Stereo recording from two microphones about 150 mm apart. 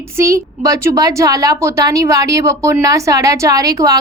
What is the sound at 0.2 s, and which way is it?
A woman's voice, 20° right (ahead or behind).